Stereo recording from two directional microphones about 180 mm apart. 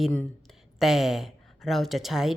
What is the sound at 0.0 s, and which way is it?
Speech, 5° left (ahead or behind).